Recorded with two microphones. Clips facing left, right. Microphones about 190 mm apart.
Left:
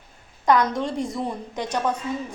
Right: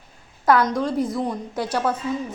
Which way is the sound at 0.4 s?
5° right (ahead or behind).